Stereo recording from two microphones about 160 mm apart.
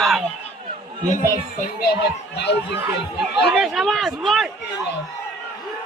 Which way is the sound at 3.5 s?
Centre (ahead or behind).